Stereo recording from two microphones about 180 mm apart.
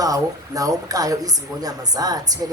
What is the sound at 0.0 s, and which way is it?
Speech, 20° right (ahead or behind).